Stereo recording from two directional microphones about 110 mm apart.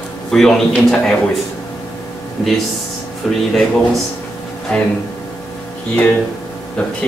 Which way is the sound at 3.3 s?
Centre (ahead or behind).